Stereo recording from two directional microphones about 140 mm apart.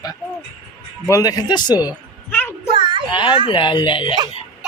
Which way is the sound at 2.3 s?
15° left (ahead or behind).